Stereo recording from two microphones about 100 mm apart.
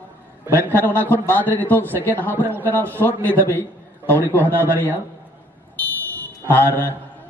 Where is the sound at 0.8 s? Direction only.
20° left (ahead or behind).